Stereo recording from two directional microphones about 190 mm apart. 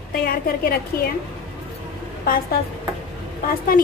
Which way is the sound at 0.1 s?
50° left (ahead or behind).